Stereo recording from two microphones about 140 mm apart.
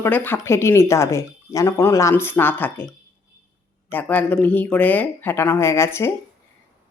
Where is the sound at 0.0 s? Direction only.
15° left (ahead or behind).